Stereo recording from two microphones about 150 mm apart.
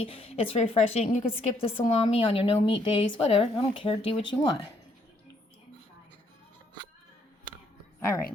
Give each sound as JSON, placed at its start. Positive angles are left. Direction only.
{"t": 0.0, "sound": "a woman's voice", "side_deg": 40}